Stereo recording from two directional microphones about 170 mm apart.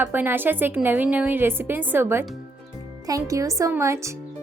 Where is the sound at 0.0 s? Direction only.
10° right (ahead or behind).